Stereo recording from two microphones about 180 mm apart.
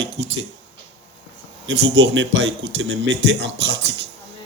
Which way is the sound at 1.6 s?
90° right.